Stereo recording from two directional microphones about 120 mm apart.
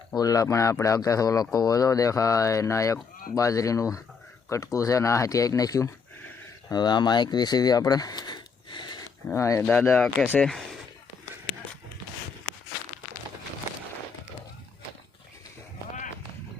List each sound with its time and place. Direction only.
0.2 s speech: 30° left (ahead or behind)
9.3 s speech: 25° left (ahead or behind)
10.0 s speech: 5° left (ahead or behind)